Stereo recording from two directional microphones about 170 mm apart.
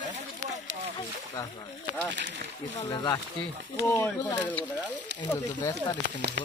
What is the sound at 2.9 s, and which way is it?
Speech, 25° left (ahead or behind).